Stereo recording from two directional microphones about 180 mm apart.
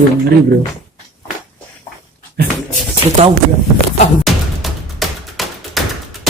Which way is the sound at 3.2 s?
35° right (ahead or behind).